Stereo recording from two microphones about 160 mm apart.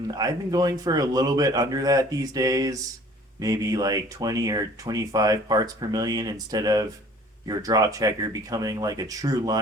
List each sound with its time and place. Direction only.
0.1 s speech: 25° right (ahead or behind)